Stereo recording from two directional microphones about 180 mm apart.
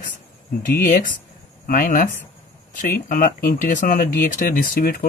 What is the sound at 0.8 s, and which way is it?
Speech, 45° left (ahead or behind).